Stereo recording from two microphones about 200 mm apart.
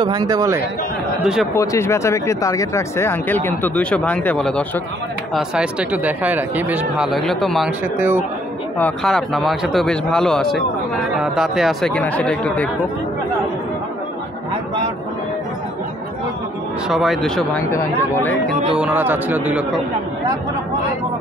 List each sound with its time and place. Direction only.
0.0 s a man's voice: 20° right (ahead or behind)
1.2 s speech: 5° right (ahead or behind)
1.5 s speech: 15° left (ahead or behind)
8.0 s a man's voice: 10° right (ahead or behind)
8.7 s speech: 5° left (ahead or behind)
16.9 s speech: centre (ahead or behind)
18.8 s a man's voice: 10° right (ahead or behind)